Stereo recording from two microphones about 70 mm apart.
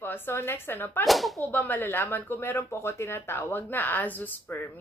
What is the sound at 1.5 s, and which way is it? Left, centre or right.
Speech, left.